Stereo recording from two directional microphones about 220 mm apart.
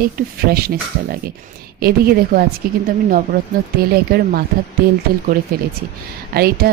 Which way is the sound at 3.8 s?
45° right (ahead or behind).